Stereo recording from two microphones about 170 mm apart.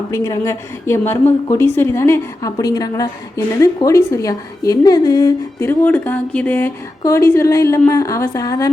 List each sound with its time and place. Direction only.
0.1 s a woman's voice: 20° left (ahead or behind)